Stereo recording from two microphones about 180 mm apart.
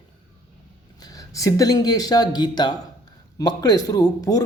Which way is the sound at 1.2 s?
20° left (ahead or behind).